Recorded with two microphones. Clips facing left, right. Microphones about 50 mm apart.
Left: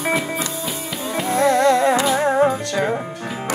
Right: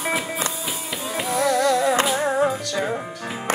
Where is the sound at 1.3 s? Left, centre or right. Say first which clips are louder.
Left 4 dB; left.